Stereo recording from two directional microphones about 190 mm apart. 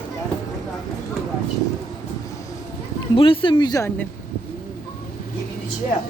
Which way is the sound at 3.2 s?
30° left (ahead or behind).